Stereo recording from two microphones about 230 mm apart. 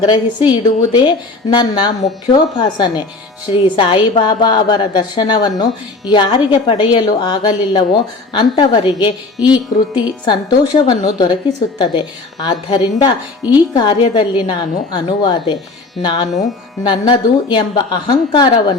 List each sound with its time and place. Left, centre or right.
0.0 s a woman's voice: centre